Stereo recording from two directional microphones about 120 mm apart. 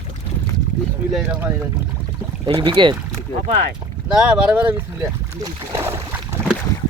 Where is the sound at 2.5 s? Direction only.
40° right (ahead or behind).